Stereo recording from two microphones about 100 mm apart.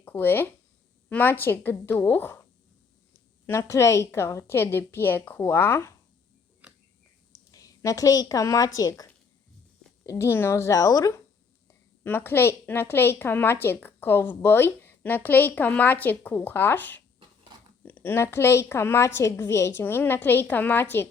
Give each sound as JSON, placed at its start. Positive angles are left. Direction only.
{"t": 0.0, "sound": "a woman's voice", "side_deg": 20}
{"t": 3.4, "sound": "a woman's voice", "side_deg": 25}
{"t": 6.6, "sound": "a sound", "side_deg": -10}
{"t": 7.5, "sound": "a woman's voice", "side_deg": 35}
{"t": 10.1, "sound": "a woman's voice", "side_deg": 25}
{"t": 11.7, "sound": "a woman's voice", "side_deg": 20}